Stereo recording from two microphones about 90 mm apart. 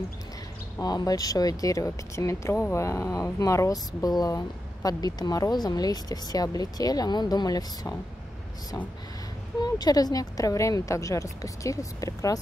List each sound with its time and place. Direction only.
0.7 s speech: 45° left (ahead or behind)
9.6 s speech: 45° left (ahead or behind)